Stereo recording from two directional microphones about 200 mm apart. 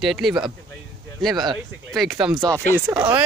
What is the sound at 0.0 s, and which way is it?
Speech, centre (ahead or behind).